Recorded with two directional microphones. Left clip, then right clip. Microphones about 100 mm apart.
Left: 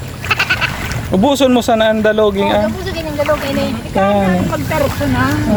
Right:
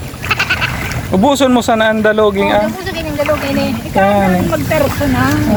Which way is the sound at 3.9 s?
35° left (ahead or behind).